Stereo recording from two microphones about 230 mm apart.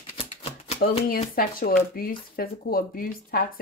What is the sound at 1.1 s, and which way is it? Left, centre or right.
Speech, left.